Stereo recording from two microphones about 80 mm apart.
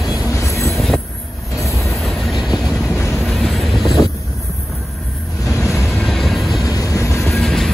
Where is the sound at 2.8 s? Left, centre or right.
Left.